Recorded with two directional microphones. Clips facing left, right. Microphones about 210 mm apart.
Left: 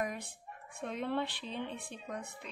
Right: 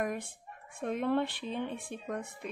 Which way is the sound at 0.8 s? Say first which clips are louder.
Right 5 dB; 50° right (ahead or behind).